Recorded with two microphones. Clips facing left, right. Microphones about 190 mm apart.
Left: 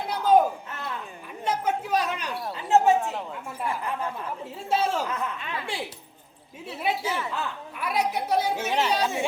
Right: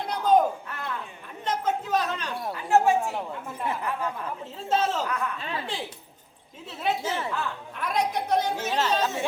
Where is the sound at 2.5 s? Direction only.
20° left (ahead or behind).